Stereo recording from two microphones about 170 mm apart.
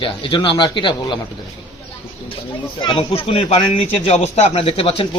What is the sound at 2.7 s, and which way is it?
Speech, 30° left (ahead or behind).